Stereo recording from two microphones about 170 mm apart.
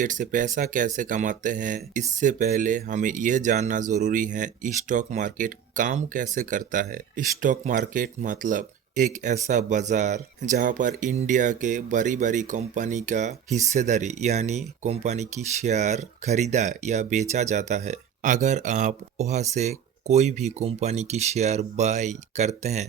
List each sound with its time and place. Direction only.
0.0 s speech: 50° right (ahead or behind)